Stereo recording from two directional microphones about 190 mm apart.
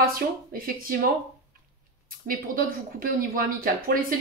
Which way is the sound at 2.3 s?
50° right (ahead or behind).